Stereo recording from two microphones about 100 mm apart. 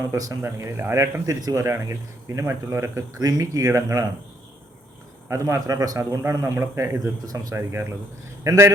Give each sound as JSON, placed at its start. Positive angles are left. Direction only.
{"t": 0.1, "sound": "speech", "side_deg": -30}
{"t": 5.3, "sound": "speech", "side_deg": -35}